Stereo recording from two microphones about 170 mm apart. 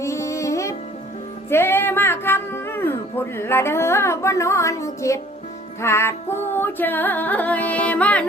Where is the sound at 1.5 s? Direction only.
15° left (ahead or behind).